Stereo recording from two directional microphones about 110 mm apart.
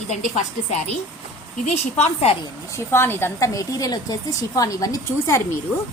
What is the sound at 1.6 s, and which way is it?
Speech, 80° left.